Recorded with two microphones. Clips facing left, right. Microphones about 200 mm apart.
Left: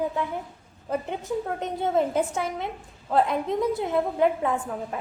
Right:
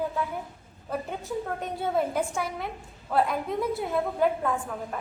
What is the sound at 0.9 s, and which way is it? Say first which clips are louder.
A woman's voice: left 4 dB; 20° left (ahead or behind).